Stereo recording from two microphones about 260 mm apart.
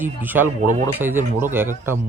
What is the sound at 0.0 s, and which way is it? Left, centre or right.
A man's voice, centre.